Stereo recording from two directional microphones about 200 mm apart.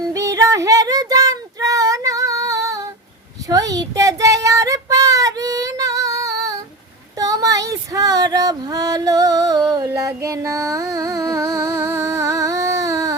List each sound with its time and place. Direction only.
0.0 s child singing: 15° right (ahead or behind)